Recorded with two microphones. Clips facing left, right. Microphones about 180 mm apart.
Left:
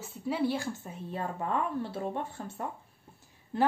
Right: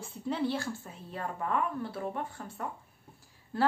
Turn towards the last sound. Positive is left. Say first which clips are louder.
# left 1 dB
turn(degrees=20)  # may be behind; listen again after turning